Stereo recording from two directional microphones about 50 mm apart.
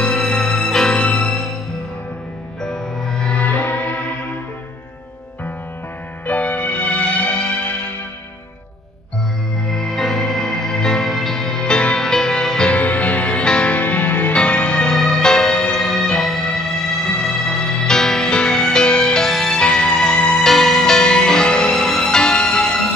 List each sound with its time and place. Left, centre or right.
0.0 s music: centre
2.6 s music: centre
3.4 s music: left
6.2 s music: left
9.7 s music: centre
12.7 s music: left
14.3 s music: left
15.0 s music: centre
19.6 s music: centre
20.4 s music: centre